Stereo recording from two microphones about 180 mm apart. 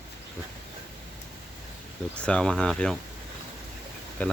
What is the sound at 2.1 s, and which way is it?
Speech, 5° left (ahead or behind).